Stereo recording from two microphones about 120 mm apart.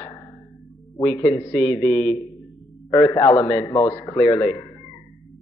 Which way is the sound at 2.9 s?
35° left (ahead or behind).